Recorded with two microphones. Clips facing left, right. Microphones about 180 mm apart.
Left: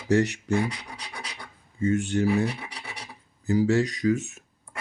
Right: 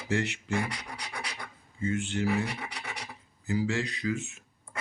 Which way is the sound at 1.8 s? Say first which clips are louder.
Left 6 dB; 45° left (ahead or behind).